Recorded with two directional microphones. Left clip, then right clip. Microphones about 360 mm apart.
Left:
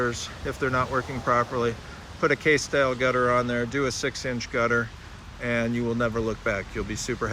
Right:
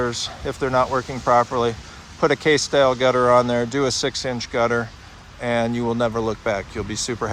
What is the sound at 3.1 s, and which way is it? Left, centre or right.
Speech, right.